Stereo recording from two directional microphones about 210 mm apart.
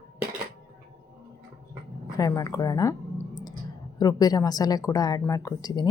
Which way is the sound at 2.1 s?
15° left (ahead or behind).